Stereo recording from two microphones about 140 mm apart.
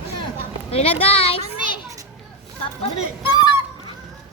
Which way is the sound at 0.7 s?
45° left (ahead or behind).